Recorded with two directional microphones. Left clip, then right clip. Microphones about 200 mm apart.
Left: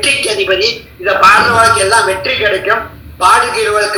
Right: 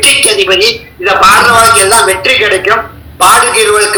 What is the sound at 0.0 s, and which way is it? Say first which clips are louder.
A man's voice: right 5 dB; 25° right (ahead or behind).